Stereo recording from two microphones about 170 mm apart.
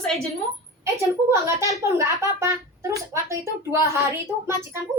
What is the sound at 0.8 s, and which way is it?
Speech, 15° right (ahead or behind).